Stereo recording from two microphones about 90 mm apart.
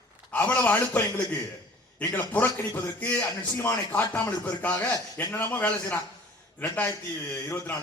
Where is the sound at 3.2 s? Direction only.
40° left (ahead or behind).